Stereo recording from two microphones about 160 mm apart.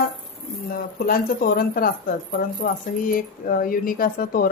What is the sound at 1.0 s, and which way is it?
Speech, 65° left (ahead or behind).